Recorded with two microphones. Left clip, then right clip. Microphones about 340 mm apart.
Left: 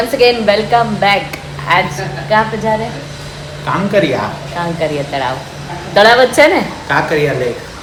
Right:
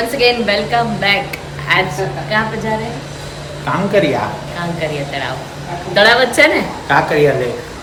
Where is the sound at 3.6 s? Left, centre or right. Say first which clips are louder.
Left 1 dB; centre.